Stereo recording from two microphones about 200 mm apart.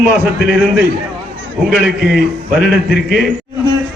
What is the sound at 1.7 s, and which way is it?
A man's voice, centre (ahead or behind).